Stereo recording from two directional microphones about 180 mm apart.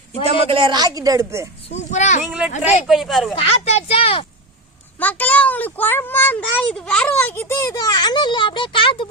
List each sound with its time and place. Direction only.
0.3 s a man's voice: 30° right (ahead or behind)
1.7 s speech: 40° left (ahead or behind)
2.2 s speech: 5° right (ahead or behind)
3.3 s speech: 35° left (ahead or behind)
4.9 s a child's voice: 10° left (ahead or behind); by 9.0 s 30° left (ahead or behind)